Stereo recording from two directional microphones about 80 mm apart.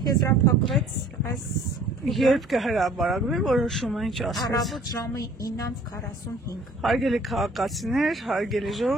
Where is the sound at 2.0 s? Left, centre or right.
Centre.